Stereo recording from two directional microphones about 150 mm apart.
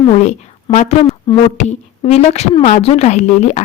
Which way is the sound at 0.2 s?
50° left (ahead or behind).